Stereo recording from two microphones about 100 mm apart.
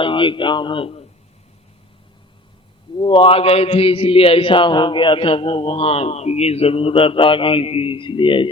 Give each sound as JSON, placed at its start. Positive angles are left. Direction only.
{"t": 0.0, "sound": "speech", "side_deg": 55}
{"t": 3.0, "sound": "a man's voice", "side_deg": 55}